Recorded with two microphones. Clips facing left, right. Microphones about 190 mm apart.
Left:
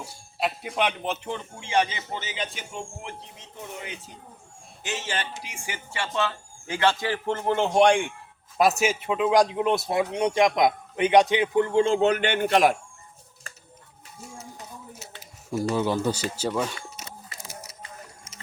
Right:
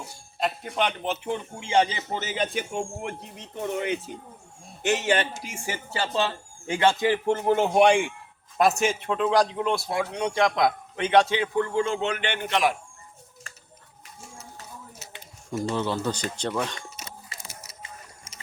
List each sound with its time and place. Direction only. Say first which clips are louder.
0.0 s speech: even; 5° left (ahead or behind)
1.5 s a man's voice: right 2 dB; 25° right (ahead or behind); by 5.2 s 60° right (ahead or behind)
5.3 s a man's voice: right 4 dB; 45° right (ahead or behind); by 12.7 s 45° left (ahead or behind)
15.7 s a man's voice: left 3 dB; 10° left (ahead or behind)